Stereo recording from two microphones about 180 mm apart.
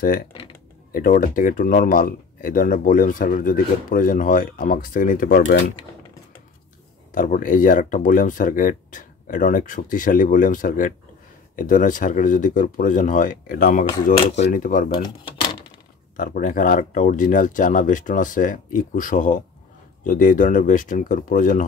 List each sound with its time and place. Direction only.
0.0 s speech: 55° left (ahead or behind)
7.1 s speech: 45° left (ahead or behind)
16.2 s speech: 45° left (ahead or behind)